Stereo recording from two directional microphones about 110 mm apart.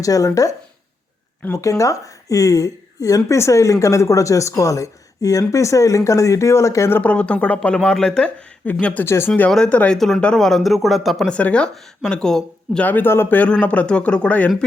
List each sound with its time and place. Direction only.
0.0 s speech: 30° left (ahead or behind)
1.8 s speech: 30° left (ahead or behind)
7.0 s speech: 10° left (ahead or behind)
9.5 s speech: 10° left (ahead or behind)
11.3 s speech: 10° left (ahead or behind)
12.8 s speech: 15° left (ahead or behind)